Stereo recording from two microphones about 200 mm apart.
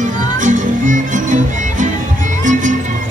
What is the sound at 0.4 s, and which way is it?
Music, 40° right (ahead or behind).